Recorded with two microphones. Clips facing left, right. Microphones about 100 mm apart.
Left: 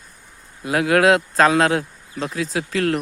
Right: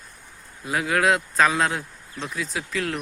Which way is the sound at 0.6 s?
70° left (ahead or behind).